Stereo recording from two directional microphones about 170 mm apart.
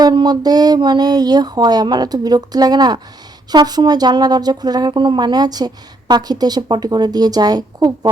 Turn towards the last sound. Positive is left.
turn(degrees=-20)  # may be behind; listen again after turning